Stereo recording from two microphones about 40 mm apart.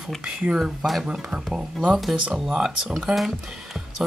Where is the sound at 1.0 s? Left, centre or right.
Centre.